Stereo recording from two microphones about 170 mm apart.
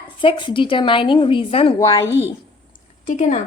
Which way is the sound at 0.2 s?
30° left (ahead or behind).